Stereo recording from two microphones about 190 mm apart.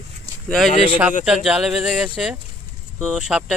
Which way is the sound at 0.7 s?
40° left (ahead or behind).